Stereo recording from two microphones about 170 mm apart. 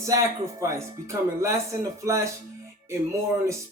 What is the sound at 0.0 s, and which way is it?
Speech, 15° right (ahead or behind).